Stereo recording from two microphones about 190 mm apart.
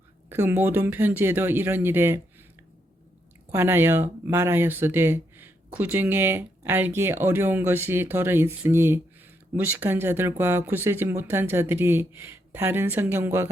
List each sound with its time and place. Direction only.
0.3 s speech: 10° right (ahead or behind)
3.5 s speech: 10° right (ahead or behind)